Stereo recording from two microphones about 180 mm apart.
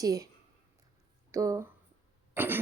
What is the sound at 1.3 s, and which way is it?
Speech, 15° right (ahead or behind).